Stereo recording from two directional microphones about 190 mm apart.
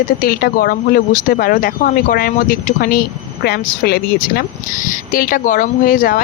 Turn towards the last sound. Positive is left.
turn(degrees=45)  # may be behind; listen again after turning